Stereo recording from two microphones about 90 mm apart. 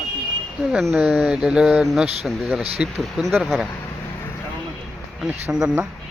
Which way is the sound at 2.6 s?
15° right (ahead or behind).